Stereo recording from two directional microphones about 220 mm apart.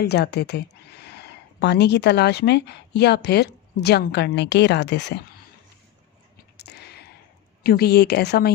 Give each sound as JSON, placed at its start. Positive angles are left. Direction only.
{"t": 0.0, "sound": "speech", "side_deg": 50}
{"t": 6.6, "sound": "a sound", "side_deg": 50}
{"t": 7.6, "sound": "speech", "side_deg": 45}